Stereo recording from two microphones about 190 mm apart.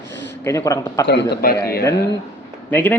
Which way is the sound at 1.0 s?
65° left (ahead or behind).